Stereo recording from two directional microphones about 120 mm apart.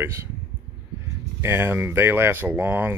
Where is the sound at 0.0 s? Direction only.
20° right (ahead or behind).